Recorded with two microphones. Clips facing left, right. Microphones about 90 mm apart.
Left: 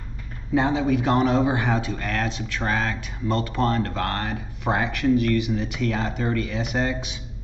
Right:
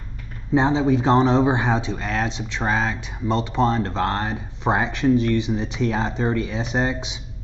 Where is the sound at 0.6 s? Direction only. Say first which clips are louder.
Right 3 dB; 25° right (ahead or behind).